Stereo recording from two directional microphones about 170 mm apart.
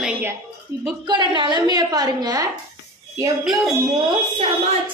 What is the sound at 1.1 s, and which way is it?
A woman's voice, 25° right (ahead or behind).